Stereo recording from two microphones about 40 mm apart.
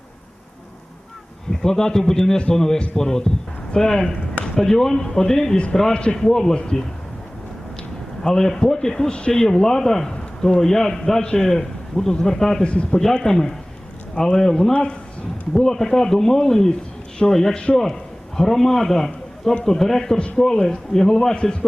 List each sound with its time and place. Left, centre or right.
1.5 s a man's voice: centre
6.1 s a man's voice: centre
8.2 s a man's voice: centre
12.6 s speech: left
13.0 s a man's voice: centre